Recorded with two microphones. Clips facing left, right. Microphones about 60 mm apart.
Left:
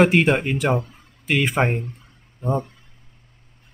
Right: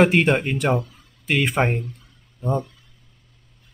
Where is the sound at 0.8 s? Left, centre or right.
Left.